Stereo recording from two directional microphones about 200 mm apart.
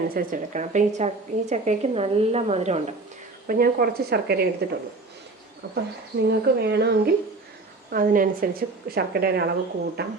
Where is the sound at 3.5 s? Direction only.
45° right (ahead or behind).